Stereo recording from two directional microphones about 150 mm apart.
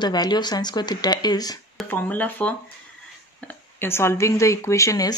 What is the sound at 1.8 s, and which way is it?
Speech, 10° left (ahead or behind).